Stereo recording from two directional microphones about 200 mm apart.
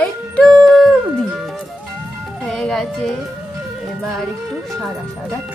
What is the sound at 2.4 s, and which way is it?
Speech, centre (ahead or behind).